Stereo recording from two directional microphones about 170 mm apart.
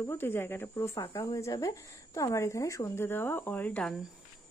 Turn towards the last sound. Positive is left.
turn(degrees=10)  # may be behind; listen again after turning